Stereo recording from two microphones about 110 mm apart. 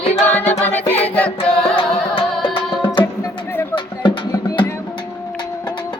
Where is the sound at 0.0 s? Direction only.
75° left (ahead or behind).